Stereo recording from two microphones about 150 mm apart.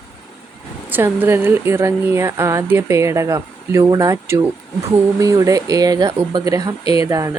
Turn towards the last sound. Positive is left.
turn(degrees=-20)  # may be behind; listen again after turning